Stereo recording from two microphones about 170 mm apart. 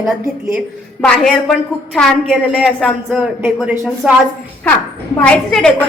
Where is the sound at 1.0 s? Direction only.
5° left (ahead or behind).